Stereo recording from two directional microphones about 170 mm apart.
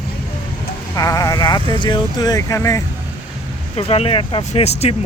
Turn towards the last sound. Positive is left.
turn(degrees=35)  # may be behind; listen again after turning